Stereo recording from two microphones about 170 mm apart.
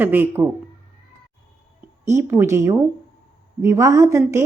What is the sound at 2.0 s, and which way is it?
A woman's voice, 15° right (ahead or behind).